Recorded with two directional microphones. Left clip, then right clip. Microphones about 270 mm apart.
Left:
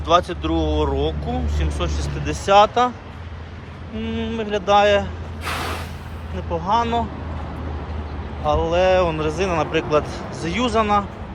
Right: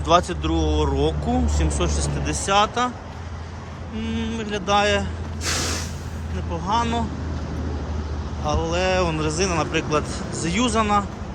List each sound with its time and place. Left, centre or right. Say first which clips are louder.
0.0 s speech: left 1 dB; centre
4.0 s speech: left 3 dB; centre
5.4 s vehicle: even; centre
6.5 s speech: left 3 dB; centre
8.4 s speech: left 5 dB; centre